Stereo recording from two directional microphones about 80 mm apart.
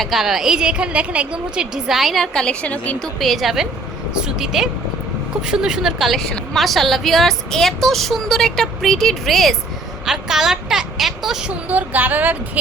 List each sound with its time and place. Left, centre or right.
0.0 s a woman's voice: centre
3.2 s a woman's voice: centre
11.7 s speech: right